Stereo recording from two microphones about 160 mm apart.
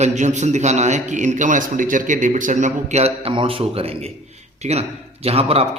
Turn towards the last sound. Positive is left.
turn(degrees=-40)  # may be behind; listen again after turning